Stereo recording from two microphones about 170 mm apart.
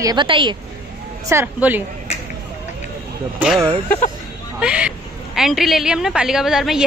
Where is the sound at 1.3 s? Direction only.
10° right (ahead or behind).